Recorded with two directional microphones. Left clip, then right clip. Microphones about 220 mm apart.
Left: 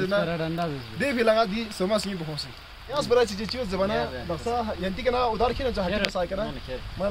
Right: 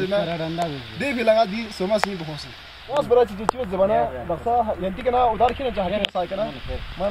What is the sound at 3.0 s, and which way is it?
Speech, 25° left (ahead or behind).